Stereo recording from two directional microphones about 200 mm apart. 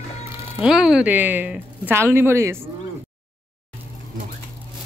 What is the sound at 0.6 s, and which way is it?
A woman's voice, 5° right (ahead or behind).